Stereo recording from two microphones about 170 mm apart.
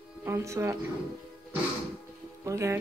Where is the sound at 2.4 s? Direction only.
20° right (ahead or behind).